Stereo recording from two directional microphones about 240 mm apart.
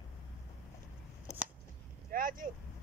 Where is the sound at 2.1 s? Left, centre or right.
Right.